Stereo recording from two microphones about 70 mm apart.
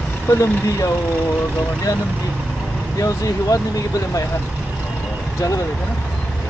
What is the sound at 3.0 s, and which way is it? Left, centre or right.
Speech, left.